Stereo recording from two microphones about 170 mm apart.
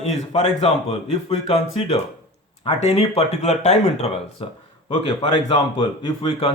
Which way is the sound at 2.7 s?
40° left (ahead or behind).